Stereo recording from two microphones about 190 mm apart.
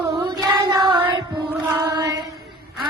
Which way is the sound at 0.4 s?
20° right (ahead or behind).